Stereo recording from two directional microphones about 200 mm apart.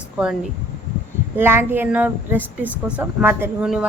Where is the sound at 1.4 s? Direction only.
10° right (ahead or behind).